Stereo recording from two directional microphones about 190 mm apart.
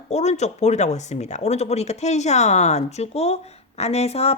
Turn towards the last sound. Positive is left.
turn(degrees=35)  # may be behind; listen again after turning